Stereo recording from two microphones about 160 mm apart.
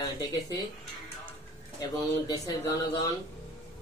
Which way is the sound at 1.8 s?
25° left (ahead or behind).